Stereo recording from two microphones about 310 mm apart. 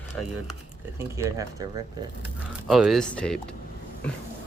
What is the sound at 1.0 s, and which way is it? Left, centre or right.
Speech, centre.